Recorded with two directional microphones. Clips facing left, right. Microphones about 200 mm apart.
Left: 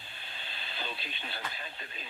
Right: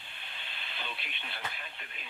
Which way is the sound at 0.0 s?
35° left (ahead or behind).